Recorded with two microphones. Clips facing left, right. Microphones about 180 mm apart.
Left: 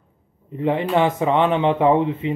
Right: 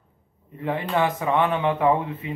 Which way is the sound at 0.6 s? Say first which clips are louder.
Left 5 dB; 20° left (ahead or behind).